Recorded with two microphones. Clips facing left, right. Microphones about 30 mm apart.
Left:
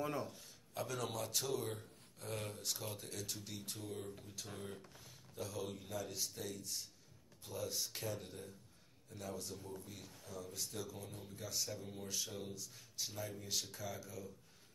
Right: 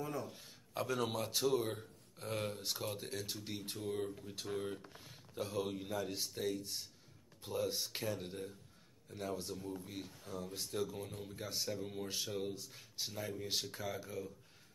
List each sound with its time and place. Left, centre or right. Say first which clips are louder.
0.0 s a man's voice: left 1 dB; left
0.3 s speech: right 4 dB; right